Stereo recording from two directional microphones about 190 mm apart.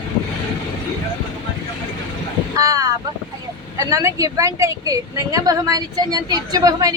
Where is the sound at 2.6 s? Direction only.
20° right (ahead or behind).